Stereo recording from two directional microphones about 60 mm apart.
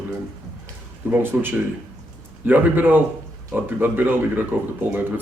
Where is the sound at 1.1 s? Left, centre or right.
Right.